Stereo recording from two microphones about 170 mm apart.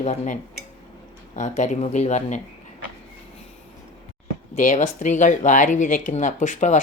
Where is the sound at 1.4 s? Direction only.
45° left (ahead or behind).